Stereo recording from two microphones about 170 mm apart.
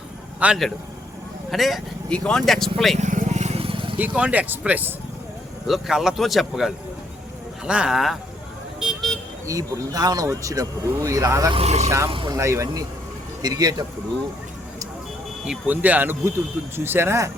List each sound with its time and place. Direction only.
0.3 s a man's voice: 5° right (ahead or behind)
3.0 s vehicle: 45° right (ahead or behind)
3.9 s speech: 10° right (ahead or behind)
8.8 s vehicle: centre (ahead or behind)
9.5 s speech: 20° right (ahead or behind)
11.5 s speech: 40° right (ahead or behind)
12.4 s speech: 15° right (ahead or behind)
15.4 s speech: 10° right (ahead or behind)